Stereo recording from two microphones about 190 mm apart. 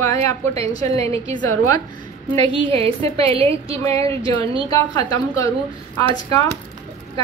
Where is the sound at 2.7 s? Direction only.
30° right (ahead or behind).